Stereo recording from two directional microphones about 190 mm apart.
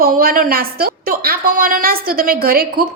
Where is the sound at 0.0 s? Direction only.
50° right (ahead or behind).